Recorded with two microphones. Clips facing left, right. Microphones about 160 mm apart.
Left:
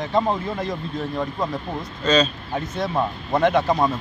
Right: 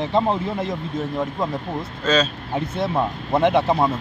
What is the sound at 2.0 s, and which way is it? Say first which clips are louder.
Speech: left 1 dB; 5° right (ahead or behind).